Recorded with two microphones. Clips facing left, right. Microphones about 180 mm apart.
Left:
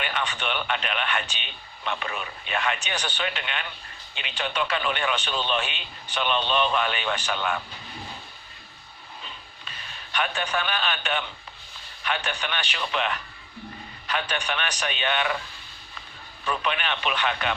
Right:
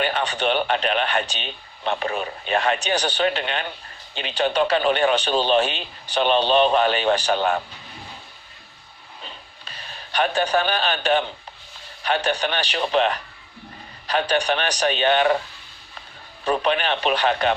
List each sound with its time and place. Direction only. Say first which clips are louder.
0.0 s a man's voice: right 7 dB; 35° right (ahead or behind)
9.6 s a man's voice: right 4 dB; 35° right (ahead or behind)
16.4 s a man's voice: right 7 dB; 35° right (ahead or behind)